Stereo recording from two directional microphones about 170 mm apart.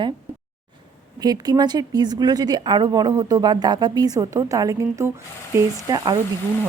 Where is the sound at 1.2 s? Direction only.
25° right (ahead or behind).